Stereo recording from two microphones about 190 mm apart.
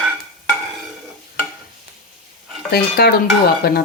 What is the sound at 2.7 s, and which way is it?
Dishes, 55° left (ahead or behind).